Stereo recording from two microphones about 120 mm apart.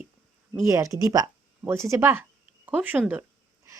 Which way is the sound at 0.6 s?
25° right (ahead or behind).